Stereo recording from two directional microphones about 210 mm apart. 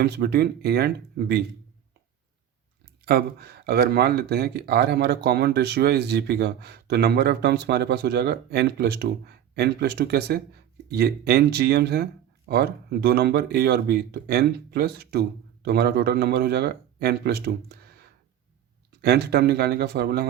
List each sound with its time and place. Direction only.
0.0 s speech: 50° right (ahead or behind)
3.1 s speech: 50° right (ahead or behind)